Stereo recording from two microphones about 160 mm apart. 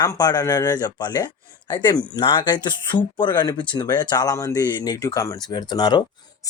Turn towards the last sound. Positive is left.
turn(degrees=25)  # may be behind; listen again after turning